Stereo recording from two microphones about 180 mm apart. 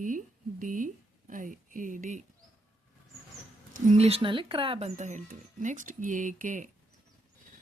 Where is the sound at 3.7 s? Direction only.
40° right (ahead or behind).